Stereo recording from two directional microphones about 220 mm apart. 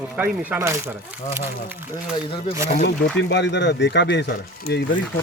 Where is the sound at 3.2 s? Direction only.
50° left (ahead or behind).